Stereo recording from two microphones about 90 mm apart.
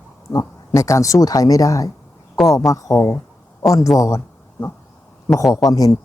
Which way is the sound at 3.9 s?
35° left (ahead or behind).